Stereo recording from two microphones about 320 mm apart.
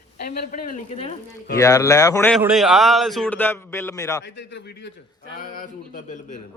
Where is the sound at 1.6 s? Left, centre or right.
Centre.